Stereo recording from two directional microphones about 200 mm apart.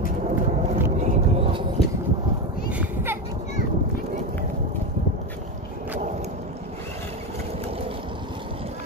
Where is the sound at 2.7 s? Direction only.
10° right (ahead or behind).